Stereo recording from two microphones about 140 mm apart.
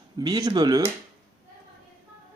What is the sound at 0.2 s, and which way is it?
Speech, 30° right (ahead or behind).